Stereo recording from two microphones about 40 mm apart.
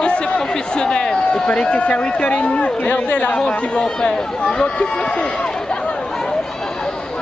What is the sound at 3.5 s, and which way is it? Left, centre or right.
Speech, left.